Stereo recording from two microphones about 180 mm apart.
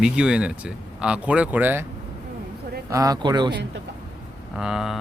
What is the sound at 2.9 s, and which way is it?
Speech, 20° right (ahead or behind).